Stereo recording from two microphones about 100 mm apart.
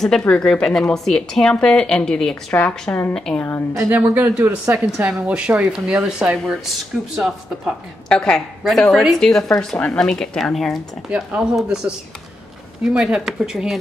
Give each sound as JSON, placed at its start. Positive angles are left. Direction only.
{"t": 0.2, "sound": "a woman's voice", "side_deg": 10}
{"t": 3.9, "sound": "speech", "side_deg": -15}
{"t": 4.6, "sound": "a woman's voice", "side_deg": -30}
{"t": 5.2, "sound": "speech", "side_deg": -10}
{"t": 8.1, "sound": "speech", "side_deg": 5}
{"t": 11.1, "sound": "speech", "side_deg": -10}